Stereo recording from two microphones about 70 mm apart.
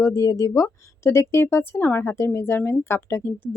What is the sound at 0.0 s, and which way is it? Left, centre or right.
A woman's voice, left.